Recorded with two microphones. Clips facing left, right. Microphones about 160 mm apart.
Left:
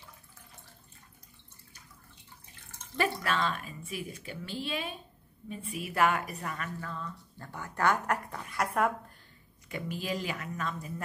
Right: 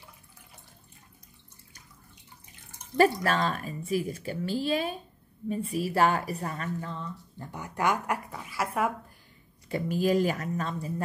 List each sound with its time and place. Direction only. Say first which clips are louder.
3.0 s a woman's voice: right 7 dB; 40° right (ahead or behind); by 8.9 s 5° right (ahead or behind)
9.7 s speech: right 9 dB; 40° right (ahead or behind)